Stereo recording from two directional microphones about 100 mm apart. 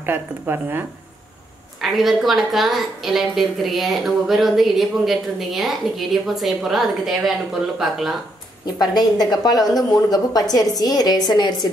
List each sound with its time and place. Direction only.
0.0 s a woman's voice: 20° right (ahead or behind)
1.8 s a woman's voice: centre (ahead or behind)
8.7 s a woman's voice: 45° left (ahead or behind)